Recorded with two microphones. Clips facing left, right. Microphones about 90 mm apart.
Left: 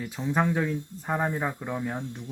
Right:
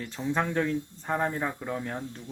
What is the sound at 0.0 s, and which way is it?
Speech, 5° left (ahead or behind).